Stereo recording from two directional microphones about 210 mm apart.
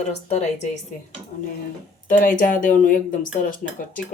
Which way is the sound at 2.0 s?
40° left (ahead or behind).